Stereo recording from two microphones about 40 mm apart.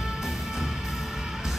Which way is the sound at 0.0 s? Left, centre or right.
Centre.